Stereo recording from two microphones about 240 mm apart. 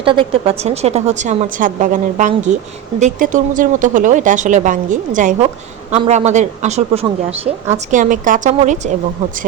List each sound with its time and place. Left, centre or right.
0.0 s a woman's voice: right